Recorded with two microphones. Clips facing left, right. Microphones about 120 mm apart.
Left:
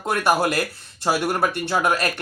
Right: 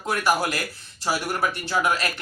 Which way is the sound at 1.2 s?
35° left (ahead or behind).